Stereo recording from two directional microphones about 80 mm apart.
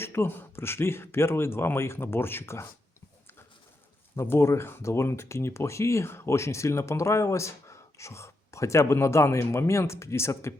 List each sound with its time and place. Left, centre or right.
0.0 s speech: left
4.1 s speech: left